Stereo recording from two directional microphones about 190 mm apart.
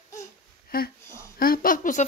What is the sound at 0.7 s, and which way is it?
Speech, 50° left (ahead or behind).